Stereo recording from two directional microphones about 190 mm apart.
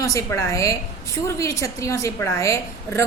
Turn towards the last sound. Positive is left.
turn(degrees=15)  # may be behind; listen again after turning